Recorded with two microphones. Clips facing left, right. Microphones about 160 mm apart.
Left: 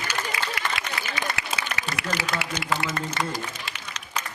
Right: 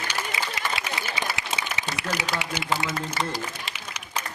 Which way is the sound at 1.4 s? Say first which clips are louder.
Even; 20° right (ahead or behind).